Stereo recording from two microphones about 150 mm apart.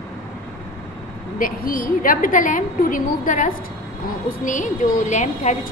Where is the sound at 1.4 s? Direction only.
70° left (ahead or behind); by 5.7 s 50° left (ahead or behind).